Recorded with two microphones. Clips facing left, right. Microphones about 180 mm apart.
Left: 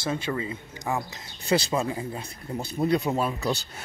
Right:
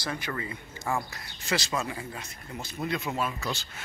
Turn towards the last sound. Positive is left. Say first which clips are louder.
# left 6 dB
turn(degrees=35)  # may be behind; listen again after turning